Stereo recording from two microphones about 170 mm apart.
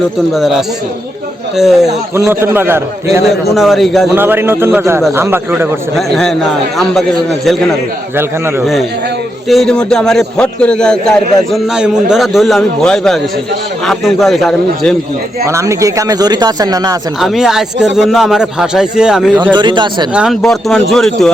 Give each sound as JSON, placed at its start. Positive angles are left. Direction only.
{"t": 0.3, "sound": "a man's voice", "side_deg": 0}
{"t": 2.2, "sound": "a man's voice", "side_deg": -10}
{"t": 3.5, "sound": "a man's voice", "side_deg": 0}
{"t": 4.1, "sound": "a man's voice", "side_deg": -10}
{"t": 6.0, "sound": "a man's voice", "side_deg": 0}
{"t": 8.1, "sound": "a man's voice", "side_deg": -15}
{"t": 9.5, "sound": "a man's voice", "side_deg": 5}
{"t": 15.4, "sound": "speech", "side_deg": -15}
{"t": 17.2, "sound": "a man's voice", "side_deg": 0}
{"t": 19.5, "sound": "speech", "side_deg": -25}
{"t": 20.1, "sound": "a man's voice", "side_deg": 0}